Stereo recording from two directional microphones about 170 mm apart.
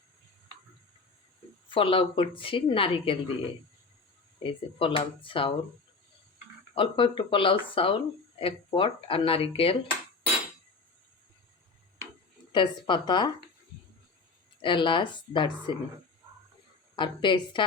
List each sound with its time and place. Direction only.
1.7 s a woman's voice: 30° left (ahead or behind)
4.4 s a woman's voice: 30° left (ahead or behind)
6.7 s a woman's voice: 30° left (ahead or behind)
12.5 s speech: 25° left (ahead or behind)
14.6 s speech: 30° left (ahead or behind)
16.9 s speech: 30° left (ahead or behind)